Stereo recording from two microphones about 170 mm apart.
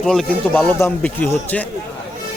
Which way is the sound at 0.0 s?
5° left (ahead or behind).